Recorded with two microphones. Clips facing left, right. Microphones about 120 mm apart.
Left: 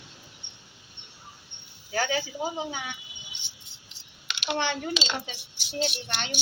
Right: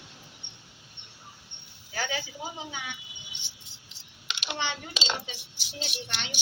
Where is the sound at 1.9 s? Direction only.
50° left (ahead or behind).